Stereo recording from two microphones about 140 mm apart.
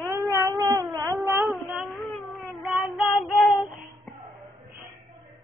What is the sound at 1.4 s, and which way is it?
Child singing, centre (ahead or behind).